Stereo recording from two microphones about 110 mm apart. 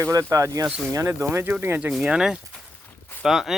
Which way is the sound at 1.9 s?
5° right (ahead or behind).